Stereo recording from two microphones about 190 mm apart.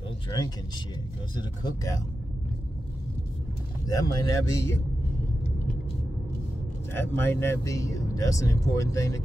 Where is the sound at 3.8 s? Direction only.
20° left (ahead or behind).